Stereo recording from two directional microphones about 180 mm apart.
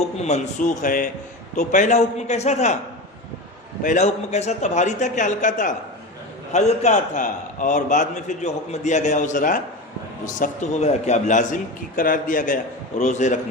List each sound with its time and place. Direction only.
0.2 s a man's voice: 40° left (ahead or behind)
3.8 s a man's voice: 40° left (ahead or behind)